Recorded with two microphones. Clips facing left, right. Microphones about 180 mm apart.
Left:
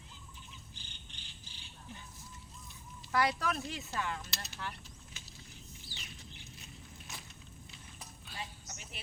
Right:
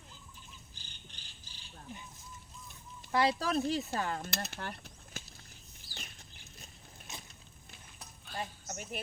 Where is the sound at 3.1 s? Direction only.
25° right (ahead or behind).